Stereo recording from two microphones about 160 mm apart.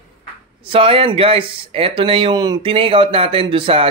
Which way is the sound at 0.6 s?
35° right (ahead or behind).